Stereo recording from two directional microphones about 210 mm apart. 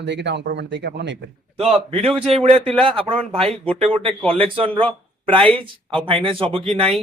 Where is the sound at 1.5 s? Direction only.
25° right (ahead or behind).